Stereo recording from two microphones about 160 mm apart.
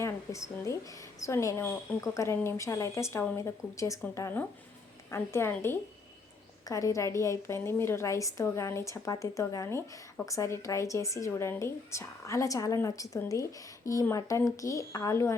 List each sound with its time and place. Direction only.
0.0 s a woman's voice: 20° left (ahead or behind)